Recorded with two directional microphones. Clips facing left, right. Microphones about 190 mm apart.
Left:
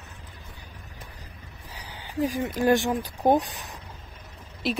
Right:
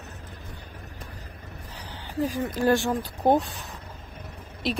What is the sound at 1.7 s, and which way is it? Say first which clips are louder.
Speech: even; 10° left (ahead or behind).